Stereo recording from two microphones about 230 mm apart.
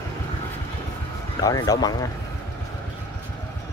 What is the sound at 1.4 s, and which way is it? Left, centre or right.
Speech, centre.